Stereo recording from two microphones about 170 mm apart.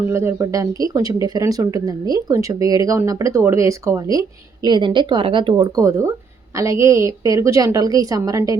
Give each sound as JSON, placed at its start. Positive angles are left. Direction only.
{"t": 0.1, "sound": "speech", "side_deg": -15}